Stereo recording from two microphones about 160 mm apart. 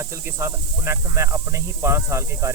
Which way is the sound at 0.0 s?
15° right (ahead or behind).